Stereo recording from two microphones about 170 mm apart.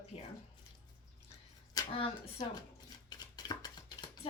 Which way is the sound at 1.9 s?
30° left (ahead or behind).